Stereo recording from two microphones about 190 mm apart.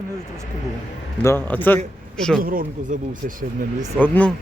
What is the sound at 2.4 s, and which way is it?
Speech, 50° right (ahead or behind).